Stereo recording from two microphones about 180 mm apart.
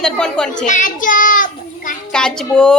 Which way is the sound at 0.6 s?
45° left (ahead or behind).